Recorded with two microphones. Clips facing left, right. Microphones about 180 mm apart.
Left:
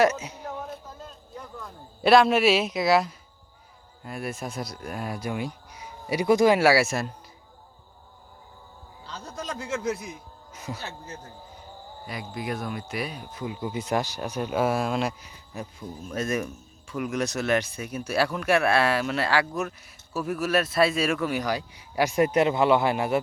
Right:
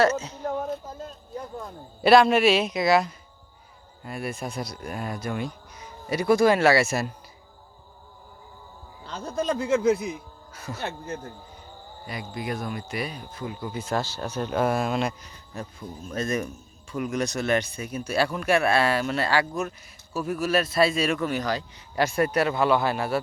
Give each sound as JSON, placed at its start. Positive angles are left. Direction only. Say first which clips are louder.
{"t": 0.0, "sound": "a man's voice", "louder": "even", "side_deg": 15}
{"t": 0.4, "sound": "music", "louder": "right 7 dB", "side_deg": -50}
{"t": 2.0, "sound": "speech", "louder": "right 1 dB", "side_deg": 0}
{"t": 9.0, "sound": "a man's voice", "louder": "right 8 dB", "side_deg": -55}
{"t": 10.5, "sound": "speech", "louder": "left 1 dB", "side_deg": 15}
{"t": 10.8, "sound": "a man's voice", "louder": "right 6 dB", "side_deg": -55}
{"t": 12.0, "sound": "speech", "louder": "even", "side_deg": 0}
{"t": 13.3, "sound": "a man's voice", "louder": "left 1 dB", "side_deg": 15}